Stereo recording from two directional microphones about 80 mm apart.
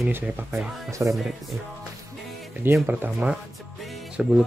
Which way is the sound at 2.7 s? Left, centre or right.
Right.